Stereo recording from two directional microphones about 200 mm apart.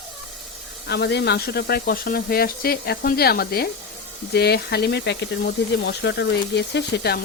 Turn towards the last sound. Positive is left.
turn(degrees=55)  # may be behind; listen again after turning